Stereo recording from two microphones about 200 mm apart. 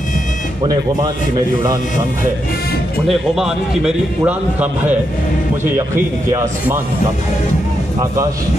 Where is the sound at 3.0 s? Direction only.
Centre (ahead or behind).